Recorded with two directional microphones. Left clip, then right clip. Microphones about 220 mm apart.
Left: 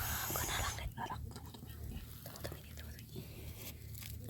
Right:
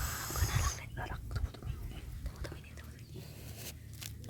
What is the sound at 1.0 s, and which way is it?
Whispering, 20° right (ahead or behind).